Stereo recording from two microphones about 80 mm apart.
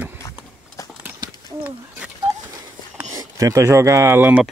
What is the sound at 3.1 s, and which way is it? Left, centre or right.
Speech, right.